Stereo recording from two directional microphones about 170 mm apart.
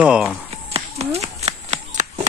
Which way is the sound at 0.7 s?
40° right (ahead or behind).